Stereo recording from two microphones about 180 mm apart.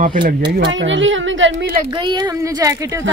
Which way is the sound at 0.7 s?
90° right.